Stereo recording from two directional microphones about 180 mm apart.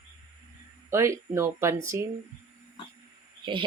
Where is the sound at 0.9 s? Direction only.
15° right (ahead or behind).